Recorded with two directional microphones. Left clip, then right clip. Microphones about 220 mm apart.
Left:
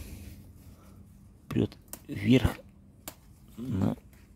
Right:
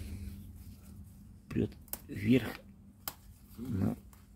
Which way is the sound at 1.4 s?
30° left (ahead or behind).